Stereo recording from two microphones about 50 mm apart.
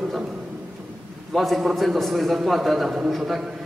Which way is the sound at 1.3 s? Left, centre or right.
Centre.